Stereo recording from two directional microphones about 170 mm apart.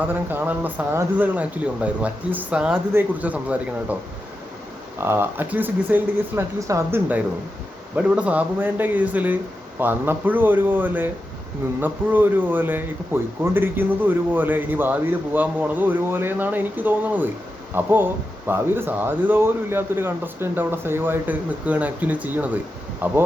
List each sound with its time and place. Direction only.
0.1 s speech: 10° right (ahead or behind)
4.9 s speech: 15° right (ahead or behind)